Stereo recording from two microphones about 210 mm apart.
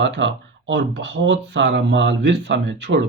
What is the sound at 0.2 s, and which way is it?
Speech, 60° right (ahead or behind).